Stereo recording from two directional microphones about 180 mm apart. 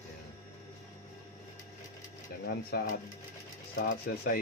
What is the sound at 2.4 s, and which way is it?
Speech, 55° left (ahead or behind).